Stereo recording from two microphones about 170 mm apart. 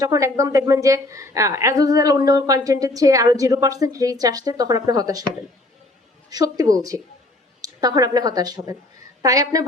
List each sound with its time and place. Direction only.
0.0 s a woman's voice: 20° right (ahead or behind)
6.3 s a woman's voice: 20° right (ahead or behind)